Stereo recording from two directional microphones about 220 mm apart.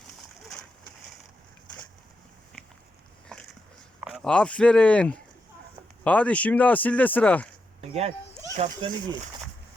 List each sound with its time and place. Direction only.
2.5 s a sound: centre (ahead or behind)
4.0 s speech: centre (ahead or behind)
7.8 s speech: 30° right (ahead or behind)